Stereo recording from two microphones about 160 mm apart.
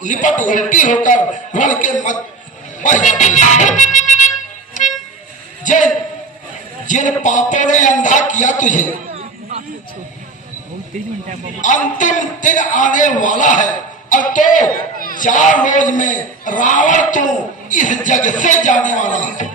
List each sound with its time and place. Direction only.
0.0 s a man's voice: 55° left (ahead or behind)
4.7 s toot: 50° left (ahead or behind)
5.6 s a man's voice: 50° left (ahead or behind)
11.6 s a man's voice: 50° left (ahead or behind)